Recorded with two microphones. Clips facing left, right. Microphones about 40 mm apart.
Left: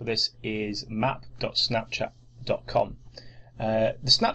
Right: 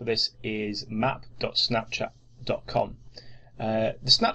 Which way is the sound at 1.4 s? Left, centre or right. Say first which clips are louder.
Right 1 dB; centre.